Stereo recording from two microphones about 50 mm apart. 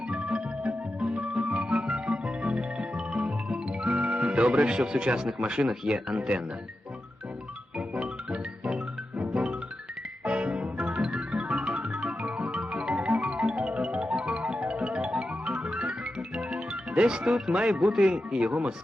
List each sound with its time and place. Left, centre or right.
0.1 s music: centre
4.9 s speech: centre
5.6 s speech: centre
7.8 s music: centre
12.5 s music: centre
12.8 s music: right
13.2 s music: centre
14.1 s music: centre
14.9 s music: centre
17.2 s speech: centre